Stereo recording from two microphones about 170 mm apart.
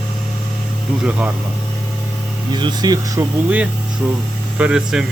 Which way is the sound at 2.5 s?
25° right (ahead or behind).